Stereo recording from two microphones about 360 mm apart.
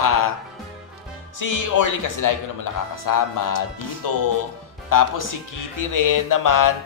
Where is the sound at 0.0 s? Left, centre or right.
Left.